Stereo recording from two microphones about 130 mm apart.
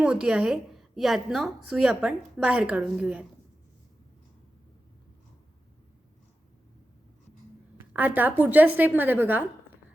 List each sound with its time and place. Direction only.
0.0 s a woman's voice: 5° right (ahead or behind)
7.8 s a woman's voice: 15° right (ahead or behind)